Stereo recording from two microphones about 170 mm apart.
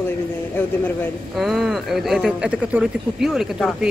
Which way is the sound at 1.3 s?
Centre (ahead or behind).